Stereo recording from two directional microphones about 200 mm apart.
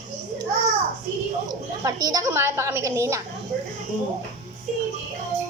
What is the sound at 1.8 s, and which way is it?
A child's voice, 20° right (ahead or behind).